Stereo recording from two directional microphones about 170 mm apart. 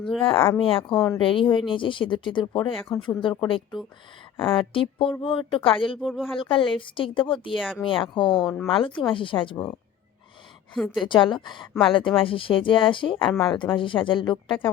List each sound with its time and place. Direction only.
0.2 s speech: 30° left (ahead or behind)
6.0 s speech: 5° right (ahead or behind)
6.4 s speech: 30° left (ahead or behind)
7.6 s speech: centre (ahead or behind)
7.9 s speech: 30° left (ahead or behind)
8.4 s speech: centre (ahead or behind)
8.7 s speech: 30° left (ahead or behind)
10.8 s speech: centre (ahead or behind)
11.0 s speech: 30° left (ahead or behind)